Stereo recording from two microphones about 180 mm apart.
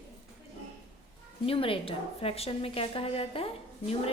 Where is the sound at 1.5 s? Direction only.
30° left (ahead or behind).